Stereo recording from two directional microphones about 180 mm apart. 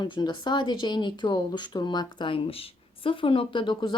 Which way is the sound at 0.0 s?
25° left (ahead or behind).